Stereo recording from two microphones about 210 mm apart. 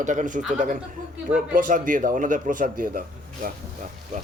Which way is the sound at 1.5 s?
40° right (ahead or behind).